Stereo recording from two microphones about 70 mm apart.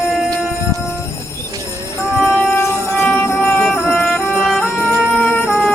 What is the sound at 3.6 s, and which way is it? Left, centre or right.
Music, centre.